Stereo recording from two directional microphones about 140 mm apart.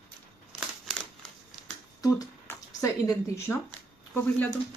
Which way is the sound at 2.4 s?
25° left (ahead or behind).